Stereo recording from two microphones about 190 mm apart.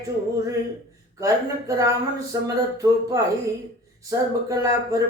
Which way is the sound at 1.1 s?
20° right (ahead or behind).